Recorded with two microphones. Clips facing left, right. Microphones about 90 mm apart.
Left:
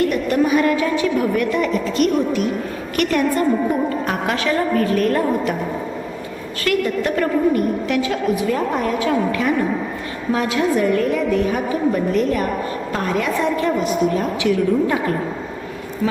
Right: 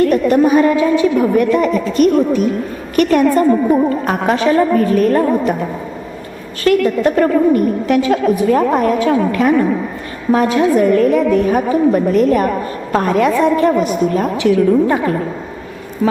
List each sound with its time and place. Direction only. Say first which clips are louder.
0.1 s a woman's voice: right 6 dB; 40° right (ahead or behind)
1.2 s a woman's voice: right 6 dB; 40° right (ahead or behind)
6.7 s a woman's voice: right 7 dB; 35° right (ahead or behind)